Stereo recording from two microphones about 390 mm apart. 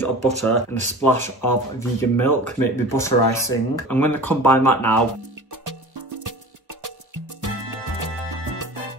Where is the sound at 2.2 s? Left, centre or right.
Left.